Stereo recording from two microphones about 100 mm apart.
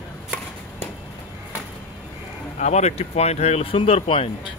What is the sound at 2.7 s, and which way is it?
Speech, 90° left.